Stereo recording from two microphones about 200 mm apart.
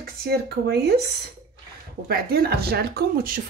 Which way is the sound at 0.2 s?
50° right (ahead or behind).